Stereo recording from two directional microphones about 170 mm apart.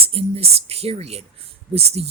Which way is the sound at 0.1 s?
35° right (ahead or behind).